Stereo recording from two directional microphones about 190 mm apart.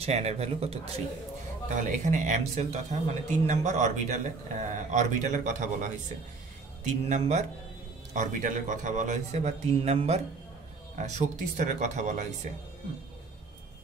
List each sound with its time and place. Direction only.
0.0 s speech: 35° right (ahead or behind)
6.9 s speech: 35° right (ahead or behind)